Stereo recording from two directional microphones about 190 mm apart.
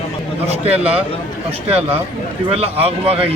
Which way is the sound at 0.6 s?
30° right (ahead or behind).